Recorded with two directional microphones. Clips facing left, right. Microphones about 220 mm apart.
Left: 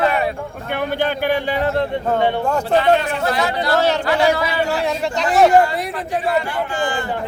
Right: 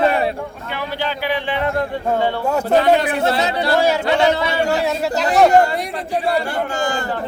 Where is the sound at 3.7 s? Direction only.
10° right (ahead or behind).